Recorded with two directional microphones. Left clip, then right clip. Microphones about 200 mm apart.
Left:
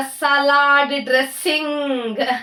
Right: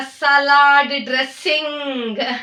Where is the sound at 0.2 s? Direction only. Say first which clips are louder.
Right 3 dB; centre (ahead or behind).